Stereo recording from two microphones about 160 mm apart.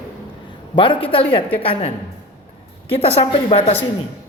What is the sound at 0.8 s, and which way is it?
A man's voice, 35° left (ahead or behind).